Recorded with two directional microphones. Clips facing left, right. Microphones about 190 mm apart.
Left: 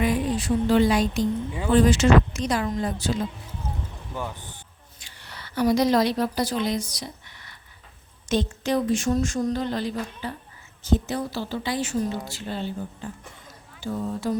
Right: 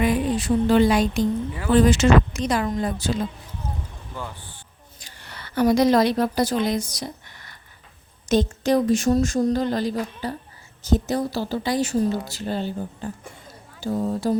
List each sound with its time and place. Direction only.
0.0 s speech: 65° right (ahead or behind)
4.1 s speech: 15° left (ahead or behind)
4.9 s a woman's voice: 45° right (ahead or behind)